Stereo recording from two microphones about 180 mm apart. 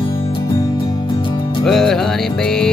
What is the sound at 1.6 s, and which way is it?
Music, centre (ahead or behind).